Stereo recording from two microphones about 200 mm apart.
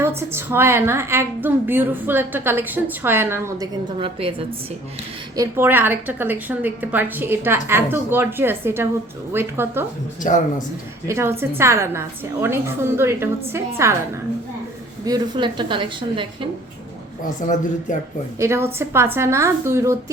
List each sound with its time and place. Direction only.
0.2 s a woman's voice: 10° right (ahead or behind)
3.9 s a woman's voice: 25° right (ahead or behind)
5.4 s a woman's voice: 10° right (ahead or behind)
11.1 s a woman's voice: 10° right (ahead or behind)
15.0 s a woman's voice: 20° right (ahead or behind)
18.3 s a woman's voice: 15° right (ahead or behind)